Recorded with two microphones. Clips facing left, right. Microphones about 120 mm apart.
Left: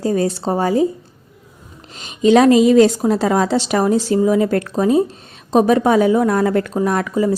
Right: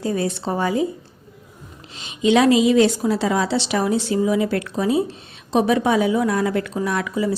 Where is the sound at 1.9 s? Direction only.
45° left (ahead or behind).